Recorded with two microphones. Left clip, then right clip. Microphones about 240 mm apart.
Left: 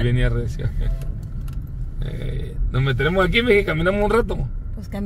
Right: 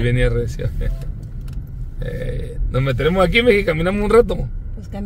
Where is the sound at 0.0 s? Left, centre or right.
Right.